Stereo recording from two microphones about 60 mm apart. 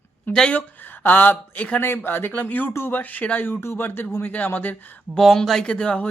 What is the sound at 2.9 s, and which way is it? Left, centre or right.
Speech, left.